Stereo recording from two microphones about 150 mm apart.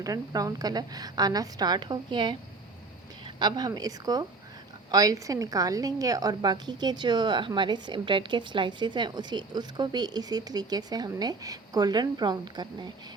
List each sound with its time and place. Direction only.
0.0 s a woman's voice: 25° right (ahead or behind)
3.3 s a woman's voice: 30° right (ahead or behind)